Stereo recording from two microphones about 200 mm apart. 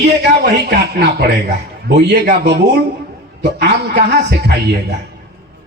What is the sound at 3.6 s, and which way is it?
Speech, 55° right (ahead or behind).